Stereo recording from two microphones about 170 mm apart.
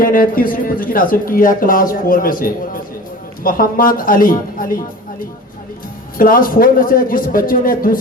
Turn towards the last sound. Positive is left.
turn(degrees=55)  # may be behind; listen again after turning